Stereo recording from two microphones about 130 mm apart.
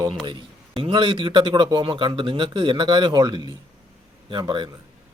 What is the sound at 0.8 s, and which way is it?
Speech, 40° right (ahead or behind).